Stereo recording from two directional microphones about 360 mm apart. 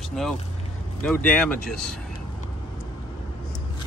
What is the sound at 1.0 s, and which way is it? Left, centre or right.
Speech, centre.